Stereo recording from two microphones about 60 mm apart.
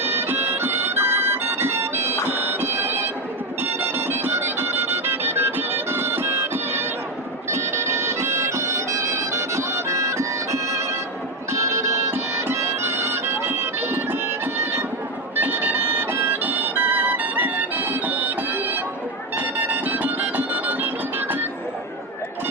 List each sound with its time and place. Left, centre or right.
0.0 s music: right
2.2 s bagpipes: right
3.6 s music: right
7.5 s bagpipes: right
11.5 s music: right
15.4 s bagpipes: right
16.4 s music: right
19.4 s music: right